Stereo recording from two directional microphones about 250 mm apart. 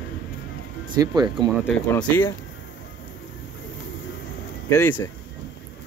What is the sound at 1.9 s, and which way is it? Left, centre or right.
Speech, centre.